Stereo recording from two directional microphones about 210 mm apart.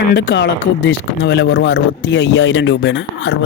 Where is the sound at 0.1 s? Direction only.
55° left (ahead or behind).